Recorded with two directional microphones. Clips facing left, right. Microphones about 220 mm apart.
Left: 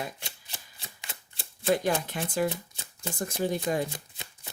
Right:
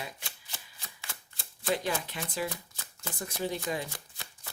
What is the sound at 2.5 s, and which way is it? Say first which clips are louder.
Shuffling cards: left 5 dB; 20° left (ahead or behind).